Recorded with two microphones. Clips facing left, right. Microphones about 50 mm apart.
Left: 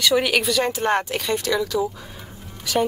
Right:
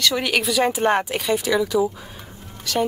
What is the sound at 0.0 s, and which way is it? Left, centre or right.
Speech, centre.